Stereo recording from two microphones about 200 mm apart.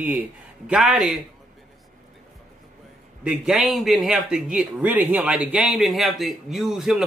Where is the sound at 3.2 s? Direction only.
5° right (ahead or behind).